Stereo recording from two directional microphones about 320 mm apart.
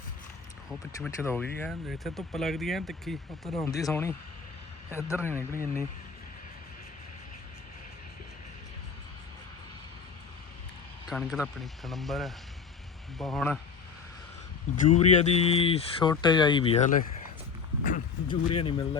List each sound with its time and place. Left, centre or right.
0.7 s speech: centre
5.4 s speech: centre
11.1 s speech: centre
14.8 s speech: centre